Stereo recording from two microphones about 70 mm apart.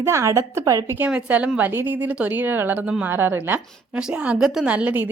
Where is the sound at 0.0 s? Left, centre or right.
Right.